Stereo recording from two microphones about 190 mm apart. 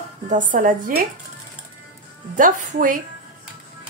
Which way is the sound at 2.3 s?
45° right (ahead or behind).